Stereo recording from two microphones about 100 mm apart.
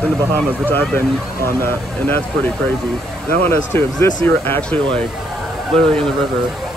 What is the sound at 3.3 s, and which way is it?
Speech, 20° left (ahead or behind).